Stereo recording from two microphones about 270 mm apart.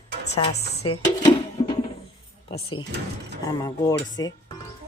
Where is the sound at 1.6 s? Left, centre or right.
Centre.